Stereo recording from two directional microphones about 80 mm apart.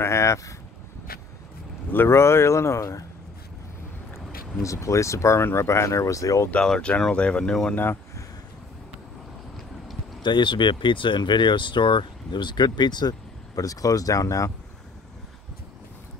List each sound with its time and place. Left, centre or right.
0.0 s speech: left
1.9 s speech: left
4.6 s speech: left
6.5 s speech: centre
7.7 s speech: left
10.2 s speech: left
13.6 s speech: left